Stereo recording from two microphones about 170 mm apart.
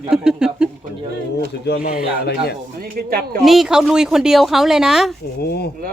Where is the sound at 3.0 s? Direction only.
60° right (ahead or behind).